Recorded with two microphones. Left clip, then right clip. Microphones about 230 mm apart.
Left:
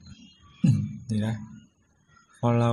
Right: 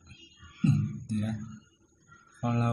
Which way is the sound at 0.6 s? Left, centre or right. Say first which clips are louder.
Left 3 dB; left.